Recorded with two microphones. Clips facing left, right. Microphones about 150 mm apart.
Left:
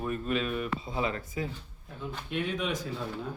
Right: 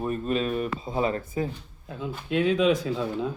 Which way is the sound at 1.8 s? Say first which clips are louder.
Right 6 dB; 90° right.